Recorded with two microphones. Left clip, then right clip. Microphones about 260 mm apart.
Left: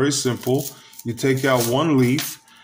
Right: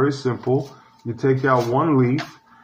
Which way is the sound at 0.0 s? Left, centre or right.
Left.